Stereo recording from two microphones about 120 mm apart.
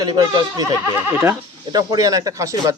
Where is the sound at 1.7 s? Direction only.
30° right (ahead or behind).